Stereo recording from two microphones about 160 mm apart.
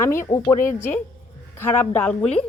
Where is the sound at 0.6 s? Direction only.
55° left (ahead or behind).